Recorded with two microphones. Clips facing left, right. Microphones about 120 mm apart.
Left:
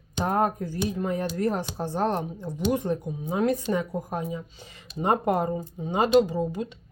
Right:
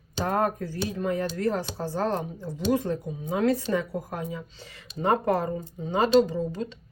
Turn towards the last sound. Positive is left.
turn(degrees=15)  # may be behind; listen again after turning